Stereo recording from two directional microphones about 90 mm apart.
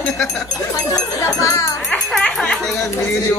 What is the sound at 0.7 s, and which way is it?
Speech, 40° left (ahead or behind).